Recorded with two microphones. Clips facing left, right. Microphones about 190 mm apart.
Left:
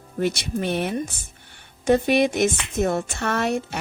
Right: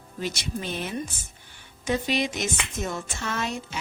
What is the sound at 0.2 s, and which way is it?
Speech, 60° left (ahead or behind).